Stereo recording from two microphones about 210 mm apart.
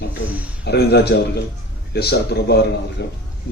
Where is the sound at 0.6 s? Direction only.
50° left (ahead or behind).